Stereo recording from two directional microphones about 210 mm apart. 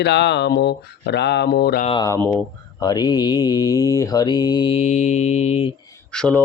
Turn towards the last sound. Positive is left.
turn(degrees=5)  # may be behind; listen again after turning